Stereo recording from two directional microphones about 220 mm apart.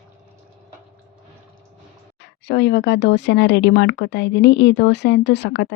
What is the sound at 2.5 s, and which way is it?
Speech, 50° left (ahead or behind).